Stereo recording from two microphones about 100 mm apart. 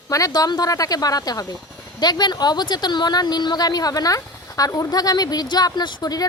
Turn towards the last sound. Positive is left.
turn(degrees=40)  # may be behind; listen again after turning